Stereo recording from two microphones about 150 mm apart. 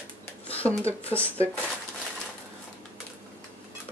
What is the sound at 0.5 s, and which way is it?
Speech, 10° left (ahead or behind).